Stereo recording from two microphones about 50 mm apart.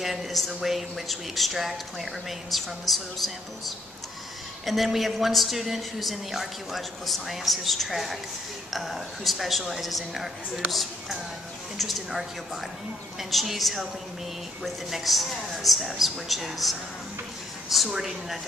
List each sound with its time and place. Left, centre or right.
0.0 s speech: centre